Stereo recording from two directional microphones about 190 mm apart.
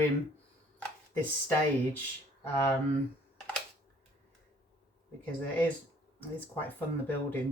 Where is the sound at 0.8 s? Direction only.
10° left (ahead or behind).